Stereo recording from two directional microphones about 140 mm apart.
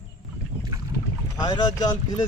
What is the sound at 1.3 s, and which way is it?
Speech, 30° left (ahead or behind).